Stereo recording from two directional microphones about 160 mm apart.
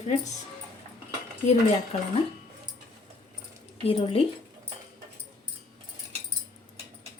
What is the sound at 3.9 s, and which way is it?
Speech, 35° left (ahead or behind).